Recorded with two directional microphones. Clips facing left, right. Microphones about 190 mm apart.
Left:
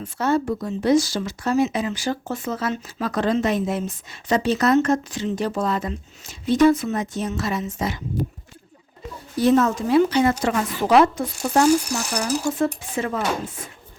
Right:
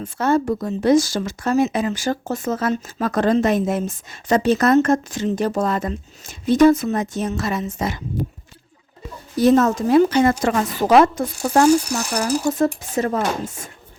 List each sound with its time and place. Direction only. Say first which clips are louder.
0.0 s speech: right 3 dB; 50° right (ahead or behind)
9.4 s speech: right 3 dB; 40° right (ahead or behind)